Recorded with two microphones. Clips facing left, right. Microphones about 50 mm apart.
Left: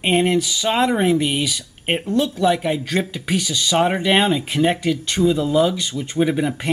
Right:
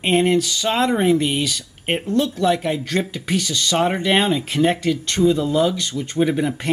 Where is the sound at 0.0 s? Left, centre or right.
Centre.